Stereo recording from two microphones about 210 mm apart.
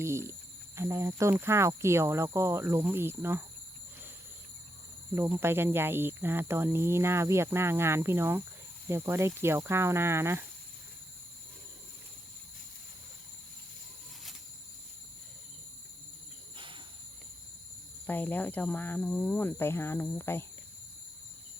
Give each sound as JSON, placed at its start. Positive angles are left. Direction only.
{"t": 0.0, "sound": "speech", "side_deg": -15}
{"t": 5.1, "sound": "speech", "side_deg": -10}
{"t": 16.6, "sound": "cricket", "side_deg": -25}
{"t": 18.0, "sound": "speech", "side_deg": 10}